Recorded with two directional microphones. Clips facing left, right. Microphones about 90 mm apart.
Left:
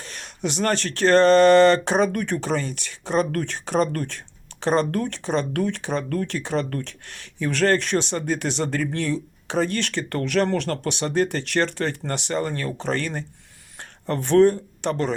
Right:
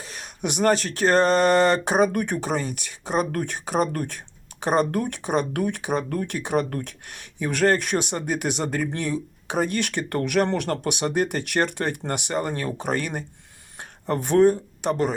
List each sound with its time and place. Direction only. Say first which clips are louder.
0.0 s speech: left 1 dB; 10° right (ahead or behind)